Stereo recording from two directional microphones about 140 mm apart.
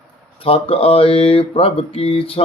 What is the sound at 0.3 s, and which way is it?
Mantra, 40° left (ahead or behind).